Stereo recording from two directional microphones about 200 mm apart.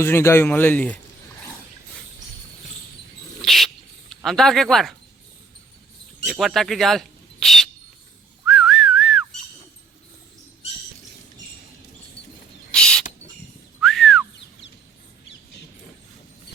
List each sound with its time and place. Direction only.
0.0 s speech: 10° left (ahead or behind)
3.4 s rodents: centre (ahead or behind)
4.1 s speech: centre (ahead or behind)
6.2 s speech: centre (ahead or behind)
8.4 s whistling: centre (ahead or behind)
12.7 s bird: 5° left (ahead or behind)
13.8 s whistling: centre (ahead or behind)